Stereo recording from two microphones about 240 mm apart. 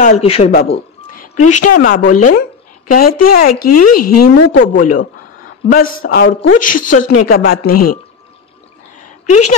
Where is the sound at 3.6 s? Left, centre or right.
Left.